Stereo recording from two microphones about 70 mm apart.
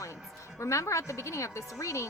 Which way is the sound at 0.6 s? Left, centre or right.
Left.